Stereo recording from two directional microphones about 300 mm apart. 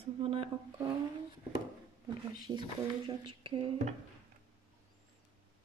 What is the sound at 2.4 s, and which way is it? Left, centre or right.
Speech, centre.